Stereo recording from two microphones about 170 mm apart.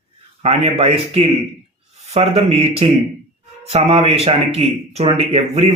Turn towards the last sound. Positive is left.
turn(degrees=-40)  # may be behind; listen again after turning